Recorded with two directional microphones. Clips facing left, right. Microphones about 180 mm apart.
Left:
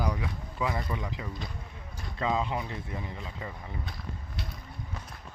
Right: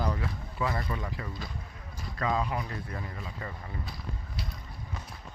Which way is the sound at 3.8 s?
Centre (ahead or behind).